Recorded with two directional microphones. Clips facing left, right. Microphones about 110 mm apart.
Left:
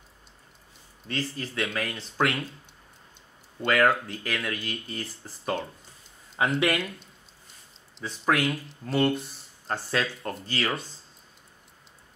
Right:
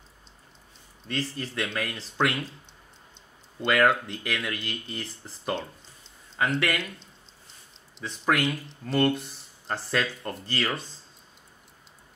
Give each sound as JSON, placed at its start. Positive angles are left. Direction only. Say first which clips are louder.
{"t": 1.0, "sound": "speech", "louder": "even", "side_deg": 0}
{"t": 3.6, "sound": "speech", "louder": "even", "side_deg": 0}
{"t": 8.0, "sound": "speech", "louder": "even", "side_deg": 0}